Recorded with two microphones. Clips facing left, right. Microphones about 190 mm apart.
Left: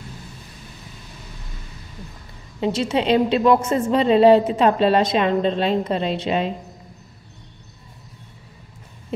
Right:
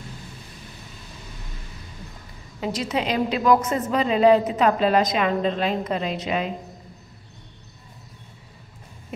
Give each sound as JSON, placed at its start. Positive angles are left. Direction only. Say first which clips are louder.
{"t": 2.6, "sound": "a woman's voice", "louder": "left 5 dB", "side_deg": 25}